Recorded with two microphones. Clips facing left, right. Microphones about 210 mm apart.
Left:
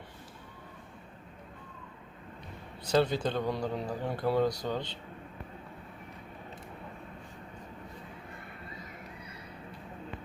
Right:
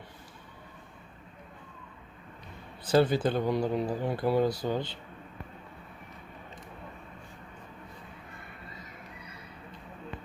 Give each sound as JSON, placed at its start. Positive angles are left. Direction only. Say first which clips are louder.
{"t": 2.8, "sound": "speech", "louder": "right 3 dB", "side_deg": -5}